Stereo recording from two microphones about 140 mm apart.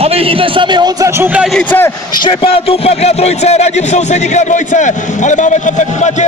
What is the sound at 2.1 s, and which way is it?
A man's voice, 35° left (ahead or behind).